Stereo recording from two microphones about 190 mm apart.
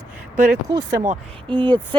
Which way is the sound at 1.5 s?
25° right (ahead or behind).